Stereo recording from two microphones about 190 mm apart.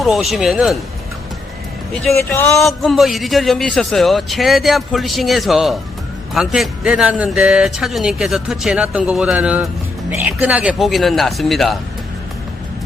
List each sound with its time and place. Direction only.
0.0 s a man's voice: centre (ahead or behind)
2.1 s speech: 15° left (ahead or behind)
2.6 s a man's voice: centre (ahead or behind)